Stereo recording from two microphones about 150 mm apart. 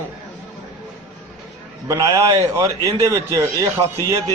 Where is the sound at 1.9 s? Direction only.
20° right (ahead or behind).